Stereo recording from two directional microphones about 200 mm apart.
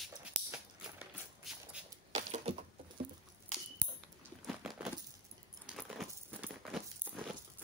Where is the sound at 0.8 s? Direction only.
5° right (ahead or behind).